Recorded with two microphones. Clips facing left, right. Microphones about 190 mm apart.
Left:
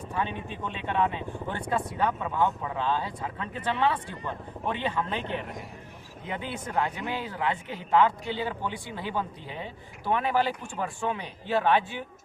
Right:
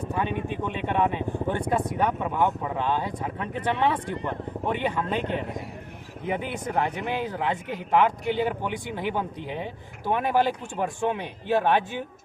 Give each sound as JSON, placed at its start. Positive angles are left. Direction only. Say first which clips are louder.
{"t": 0.4, "sound": "speech", "louder": "right 5 dB", "side_deg": -15}
{"t": 6.2, "sound": "speech", "louder": "right 6 dB", "side_deg": -15}